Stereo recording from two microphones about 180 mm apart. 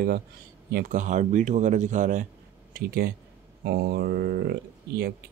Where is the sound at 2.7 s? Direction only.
60° right (ahead or behind).